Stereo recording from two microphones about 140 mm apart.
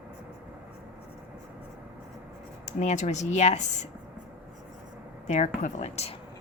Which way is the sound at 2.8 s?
55° left (ahead or behind).